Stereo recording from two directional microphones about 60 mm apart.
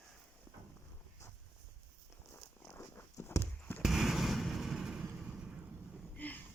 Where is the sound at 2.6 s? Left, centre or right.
Left.